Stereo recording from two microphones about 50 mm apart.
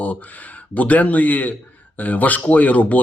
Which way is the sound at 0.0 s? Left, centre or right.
Left.